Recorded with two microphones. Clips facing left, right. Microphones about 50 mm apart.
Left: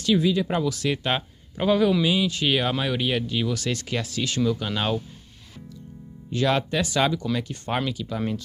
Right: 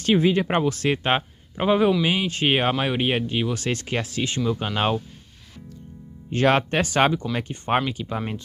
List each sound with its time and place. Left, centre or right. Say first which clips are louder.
0.0 s speech: right 2 dB; right
6.3 s speech: right 3 dB; right